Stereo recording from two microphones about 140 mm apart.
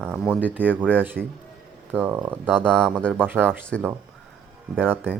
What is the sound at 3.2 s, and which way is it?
Speech, 15° right (ahead or behind).